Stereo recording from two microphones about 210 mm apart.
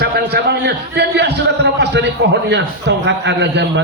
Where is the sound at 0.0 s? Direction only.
50° right (ahead or behind).